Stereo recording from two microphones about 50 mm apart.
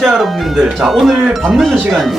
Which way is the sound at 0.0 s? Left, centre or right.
Centre.